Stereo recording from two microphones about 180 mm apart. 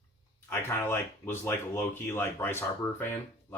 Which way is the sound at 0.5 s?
15° left (ahead or behind).